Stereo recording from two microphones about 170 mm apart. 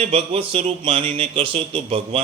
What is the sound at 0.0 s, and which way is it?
A man's voice, 35° right (ahead or behind).